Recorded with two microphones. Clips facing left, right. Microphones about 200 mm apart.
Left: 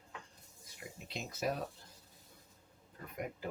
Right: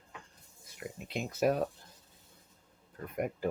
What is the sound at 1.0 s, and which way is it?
Speech, 55° right (ahead or behind).